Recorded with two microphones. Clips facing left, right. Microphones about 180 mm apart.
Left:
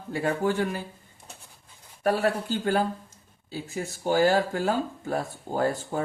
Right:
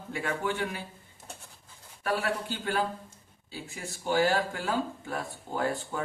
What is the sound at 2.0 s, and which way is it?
Speech, 40° left (ahead or behind).